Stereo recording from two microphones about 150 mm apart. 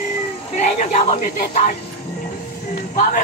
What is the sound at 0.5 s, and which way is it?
Speech, 50° left (ahead or behind).